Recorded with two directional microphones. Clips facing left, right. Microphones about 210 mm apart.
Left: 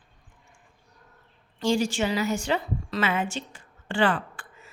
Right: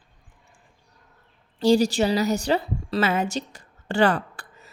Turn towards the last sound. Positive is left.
turn(degrees=-40)  # may be behind; listen again after turning